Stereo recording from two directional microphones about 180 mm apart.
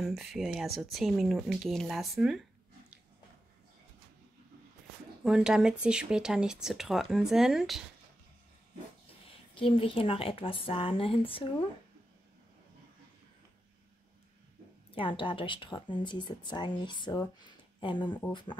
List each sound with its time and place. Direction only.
0.0 s speech: centre (ahead or behind)
5.2 s speech: 5° right (ahead or behind)
9.6 s speech: 30° left (ahead or behind)
14.9 s speech: 30° left (ahead or behind)